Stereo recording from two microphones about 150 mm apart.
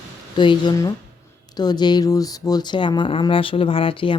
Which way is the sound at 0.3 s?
30° left (ahead or behind).